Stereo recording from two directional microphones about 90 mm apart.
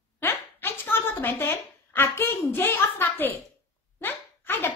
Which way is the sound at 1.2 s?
25° left (ahead or behind).